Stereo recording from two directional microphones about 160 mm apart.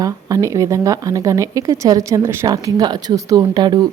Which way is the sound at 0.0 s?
20° right (ahead or behind).